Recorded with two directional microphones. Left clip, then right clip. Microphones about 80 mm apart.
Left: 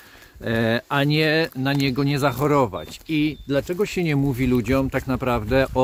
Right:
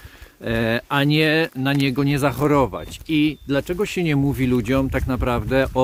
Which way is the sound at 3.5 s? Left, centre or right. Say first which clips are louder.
Even; right.